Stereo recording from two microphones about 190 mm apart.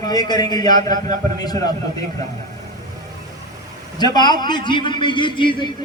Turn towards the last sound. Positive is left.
turn(degrees=25)  # may be behind; listen again after turning